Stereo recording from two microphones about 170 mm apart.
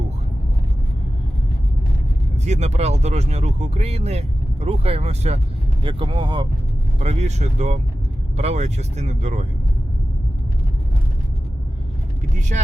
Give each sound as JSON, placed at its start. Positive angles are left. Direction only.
{"t": 2.4, "sound": "speech", "side_deg": -40}
{"t": 7.0, "sound": "speech", "side_deg": -40}
{"t": 12.4, "sound": "speech", "side_deg": -45}